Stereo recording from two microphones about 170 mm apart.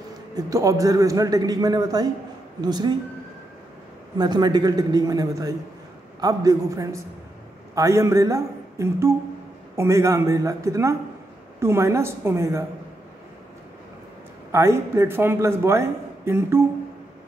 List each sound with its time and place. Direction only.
0.4 s a man's voice: 20° right (ahead or behind)
4.2 s a man's voice: 25° right (ahead or behind)
14.5 s a man's voice: 15° right (ahead or behind)